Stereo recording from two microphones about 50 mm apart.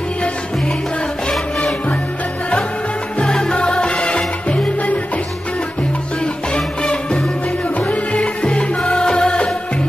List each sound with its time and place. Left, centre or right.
3.2 s music: centre
6.5 s music: centre